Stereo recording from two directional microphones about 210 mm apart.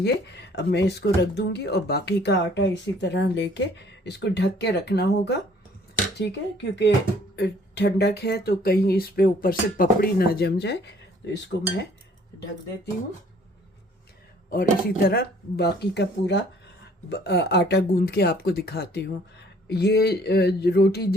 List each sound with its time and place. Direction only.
0.0 s speech: 55° left (ahead or behind)
14.5 s speech: 45° left (ahead or behind)